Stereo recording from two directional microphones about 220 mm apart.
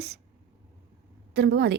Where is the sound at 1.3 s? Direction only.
50° right (ahead or behind).